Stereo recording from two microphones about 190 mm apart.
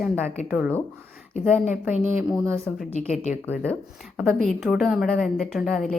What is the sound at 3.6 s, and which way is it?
A woman's voice, 5° left (ahead or behind).